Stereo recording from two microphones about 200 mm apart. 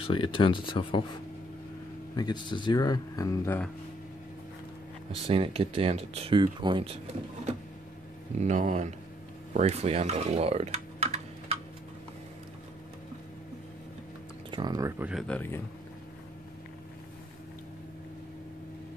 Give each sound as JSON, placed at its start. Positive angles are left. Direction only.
{"t": 0.0, "sound": "speech", "side_deg": 25}
{"t": 2.1, "sound": "speech", "side_deg": 20}
{"t": 5.2, "sound": "speech", "side_deg": -30}
{"t": 8.4, "sound": "speech", "side_deg": -35}
{"t": 14.5, "sound": "speech", "side_deg": -20}
{"t": 15.2, "sound": "speech", "side_deg": 10}